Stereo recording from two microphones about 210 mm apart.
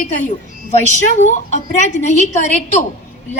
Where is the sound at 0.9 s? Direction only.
35° left (ahead or behind).